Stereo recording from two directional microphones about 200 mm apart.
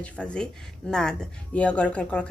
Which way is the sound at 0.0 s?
5° left (ahead or behind).